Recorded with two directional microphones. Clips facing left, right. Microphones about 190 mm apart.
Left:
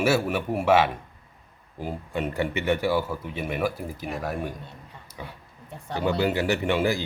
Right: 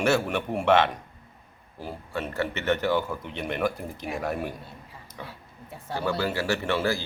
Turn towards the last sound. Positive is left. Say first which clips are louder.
# left 2 dB
turn(degrees=15)  # may be behind; listen again after turning